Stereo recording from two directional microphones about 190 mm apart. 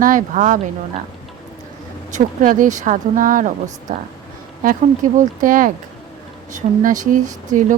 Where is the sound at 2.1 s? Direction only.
45° right (ahead or behind).